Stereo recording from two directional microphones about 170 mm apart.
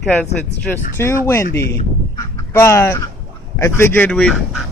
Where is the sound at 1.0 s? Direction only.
15° left (ahead or behind).